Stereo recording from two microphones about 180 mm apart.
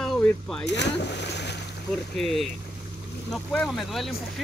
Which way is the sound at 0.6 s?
70° left (ahead or behind).